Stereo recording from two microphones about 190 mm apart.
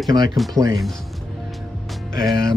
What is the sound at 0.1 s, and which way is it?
Speech, 20° right (ahead or behind).